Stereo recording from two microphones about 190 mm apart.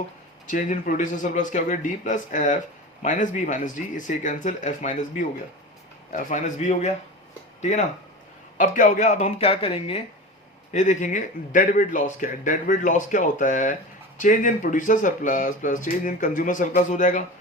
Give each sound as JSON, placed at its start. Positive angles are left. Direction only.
{"t": 0.4, "sound": "a man's voice", "side_deg": 40}
{"t": 10.7, "sound": "a man's voice", "side_deg": 40}